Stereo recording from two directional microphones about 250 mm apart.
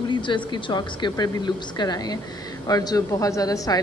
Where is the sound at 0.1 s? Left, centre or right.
Centre.